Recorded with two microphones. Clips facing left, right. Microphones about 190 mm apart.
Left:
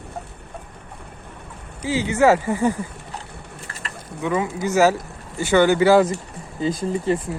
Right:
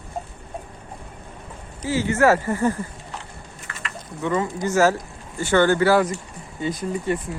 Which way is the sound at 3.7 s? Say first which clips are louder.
Even; 35° left (ahead or behind).